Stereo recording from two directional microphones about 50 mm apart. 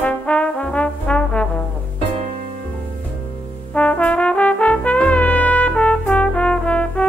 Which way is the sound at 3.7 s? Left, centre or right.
Left.